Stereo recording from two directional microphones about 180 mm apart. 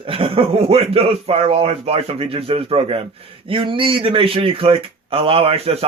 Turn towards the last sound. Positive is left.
turn(degrees=-35)  # may be behind; listen again after turning